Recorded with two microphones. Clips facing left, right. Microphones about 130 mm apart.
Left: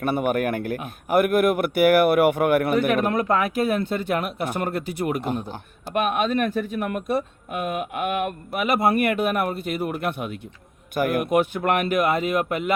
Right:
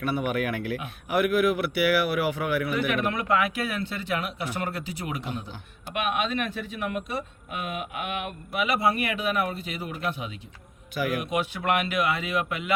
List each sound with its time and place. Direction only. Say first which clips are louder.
0.0 s a man's voice: left 5 dB; 50° left (ahead or behind)